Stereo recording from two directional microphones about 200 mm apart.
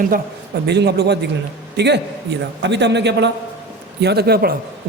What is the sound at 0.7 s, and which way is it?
A man's voice, 55° right (ahead or behind).